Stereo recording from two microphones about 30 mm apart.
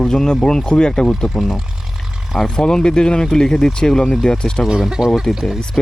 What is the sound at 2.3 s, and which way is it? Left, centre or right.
Speech, left.